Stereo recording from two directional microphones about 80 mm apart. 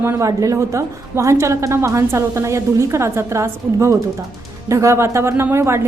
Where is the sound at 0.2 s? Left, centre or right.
Right.